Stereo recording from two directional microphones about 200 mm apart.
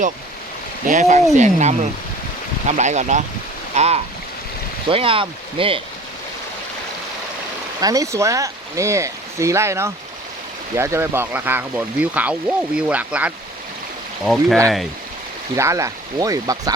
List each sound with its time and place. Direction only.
0.9 s speech: 35° right (ahead or behind)
7.8 s speech: 15° right (ahead or behind)
15.5 s speech: 15° right (ahead or behind)